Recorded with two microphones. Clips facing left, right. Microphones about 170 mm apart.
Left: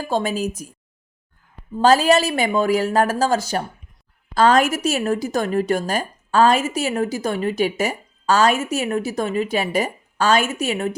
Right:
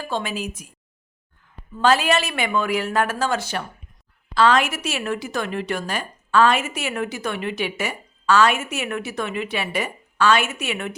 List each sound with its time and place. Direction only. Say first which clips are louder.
0.0 s a woman's voice: left 5 dB; 40° left (ahead or behind)
1.7 s a woman's voice: left 4 dB; 40° left (ahead or behind)